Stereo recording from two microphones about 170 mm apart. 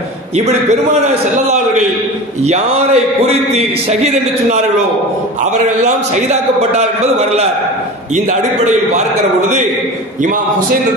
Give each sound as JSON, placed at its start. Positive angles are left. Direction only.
{"t": 0.5, "sound": "a man's voice", "side_deg": -40}